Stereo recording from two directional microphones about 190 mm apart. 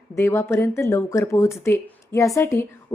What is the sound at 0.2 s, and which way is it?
A woman's voice, 15° left (ahead or behind).